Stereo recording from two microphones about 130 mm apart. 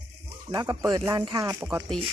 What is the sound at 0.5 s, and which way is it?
Speech, 30° right (ahead or behind).